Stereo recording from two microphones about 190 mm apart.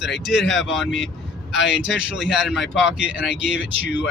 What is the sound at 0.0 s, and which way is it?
Speech, centre (ahead or behind).